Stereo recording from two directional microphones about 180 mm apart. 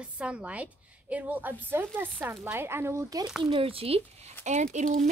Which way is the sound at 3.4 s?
30° right (ahead or behind).